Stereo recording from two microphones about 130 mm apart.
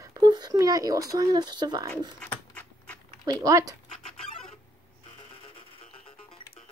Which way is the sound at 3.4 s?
25° right (ahead or behind).